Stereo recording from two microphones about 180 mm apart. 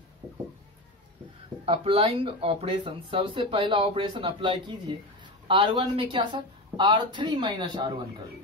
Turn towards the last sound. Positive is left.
turn(degrees=-25)  # may be behind; listen again after turning